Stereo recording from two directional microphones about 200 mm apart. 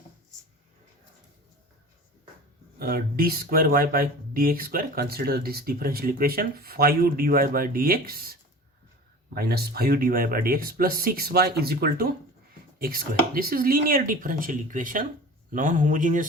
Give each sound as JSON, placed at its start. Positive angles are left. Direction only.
{"t": 2.7, "sound": "speech", "side_deg": -50}